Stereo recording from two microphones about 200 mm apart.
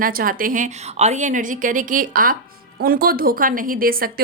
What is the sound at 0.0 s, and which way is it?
A woman's voice, 45° right (ahead or behind).